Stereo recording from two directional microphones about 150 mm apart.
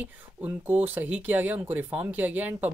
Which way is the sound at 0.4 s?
10° right (ahead or behind).